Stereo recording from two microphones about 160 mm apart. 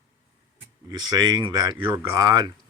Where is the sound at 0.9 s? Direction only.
25° right (ahead or behind).